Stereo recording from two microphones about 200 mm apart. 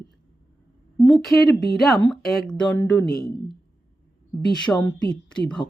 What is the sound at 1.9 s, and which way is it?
Speech, 10° left (ahead or behind).